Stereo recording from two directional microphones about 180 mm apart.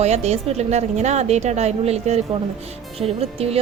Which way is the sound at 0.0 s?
35° right (ahead or behind).